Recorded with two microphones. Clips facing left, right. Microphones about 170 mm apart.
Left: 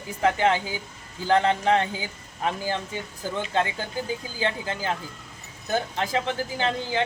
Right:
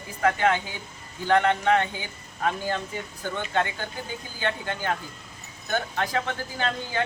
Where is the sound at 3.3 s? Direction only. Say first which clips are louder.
Left 1 dB; 30° left (ahead or behind).